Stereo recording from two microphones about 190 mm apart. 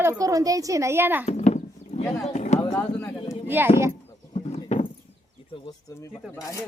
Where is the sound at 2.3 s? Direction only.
40° left (ahead or behind).